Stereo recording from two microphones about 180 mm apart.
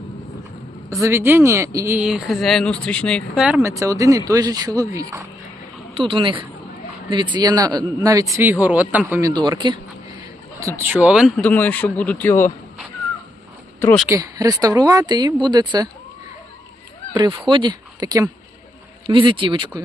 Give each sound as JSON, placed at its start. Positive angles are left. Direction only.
{"t": 1.0, "sound": "speech", "side_deg": -15}
{"t": 3.4, "sound": "a man's voice", "side_deg": -10}
{"t": 5.9, "sound": "a man's voice", "side_deg": -30}
{"t": 9.3, "sound": "speech", "side_deg": -25}
{"t": 14.1, "sound": "speech", "side_deg": -20}
{"t": 17.2, "sound": "speech", "side_deg": -25}